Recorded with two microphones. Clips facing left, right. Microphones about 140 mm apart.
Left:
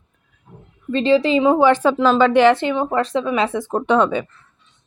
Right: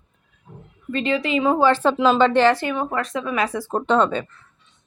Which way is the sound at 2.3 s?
15° left (ahead or behind).